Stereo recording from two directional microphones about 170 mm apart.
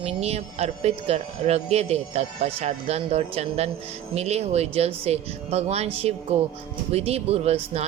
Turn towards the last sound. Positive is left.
turn(degrees=-40)  # may be behind; listen again after turning